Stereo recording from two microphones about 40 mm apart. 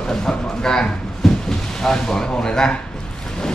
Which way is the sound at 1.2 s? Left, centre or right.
Centre.